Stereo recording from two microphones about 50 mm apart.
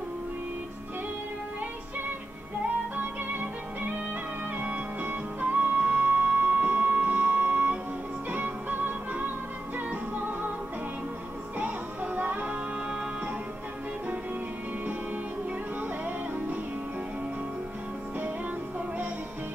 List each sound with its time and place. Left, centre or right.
3.0 s music: right
11.5 s music: right